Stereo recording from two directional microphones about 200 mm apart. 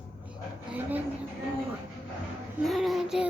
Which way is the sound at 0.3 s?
10° right (ahead or behind).